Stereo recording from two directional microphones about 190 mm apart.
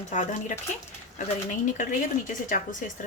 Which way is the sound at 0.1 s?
40° left (ahead or behind).